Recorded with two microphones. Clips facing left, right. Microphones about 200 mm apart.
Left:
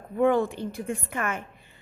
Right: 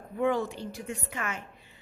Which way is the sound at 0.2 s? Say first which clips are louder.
Left 5 dB; 55° left (ahead or behind).